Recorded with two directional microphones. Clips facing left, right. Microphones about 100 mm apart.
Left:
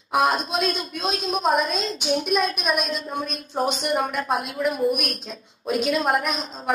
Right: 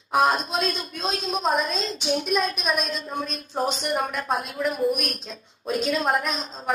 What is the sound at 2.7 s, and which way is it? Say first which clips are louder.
Speech: left 1 dB; 10° left (ahead or behind).